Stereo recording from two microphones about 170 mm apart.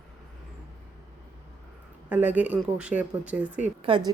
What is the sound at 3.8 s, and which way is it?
Speech, 30° right (ahead or behind).